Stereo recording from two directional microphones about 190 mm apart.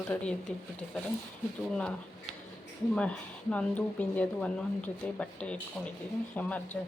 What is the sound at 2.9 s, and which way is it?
Speech, 5° left (ahead or behind).